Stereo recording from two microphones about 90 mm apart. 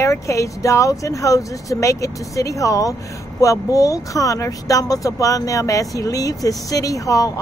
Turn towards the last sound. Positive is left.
turn(degrees=40)  # may be behind; listen again after turning